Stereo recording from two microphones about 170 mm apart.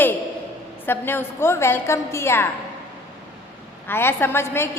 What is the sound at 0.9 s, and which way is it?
A woman's voice, 15° left (ahead or behind).